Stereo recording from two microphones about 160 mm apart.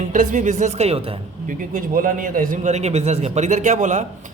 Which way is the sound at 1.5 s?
55° right (ahead or behind).